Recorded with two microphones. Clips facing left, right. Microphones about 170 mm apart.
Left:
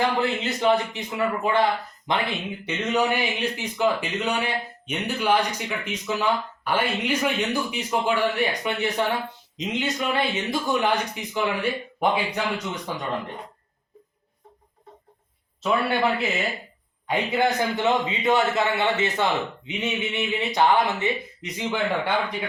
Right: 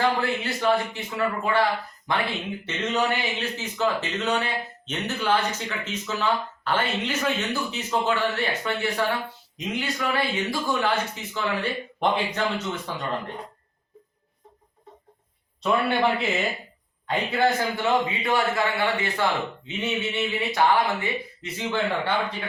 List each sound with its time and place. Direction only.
0.0 s a man's voice: 20° left (ahead or behind)
15.6 s a man's voice: 5° left (ahead or behind)
17.1 s a man's voice: 15° left (ahead or behind)